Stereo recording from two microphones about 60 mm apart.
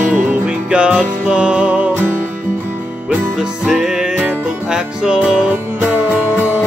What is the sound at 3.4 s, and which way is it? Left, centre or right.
Music, centre.